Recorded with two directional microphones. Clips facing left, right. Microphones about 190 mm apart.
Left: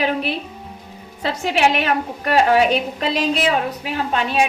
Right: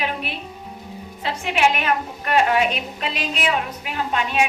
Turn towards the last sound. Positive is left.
turn(degrees=35)  # may be behind; listen again after turning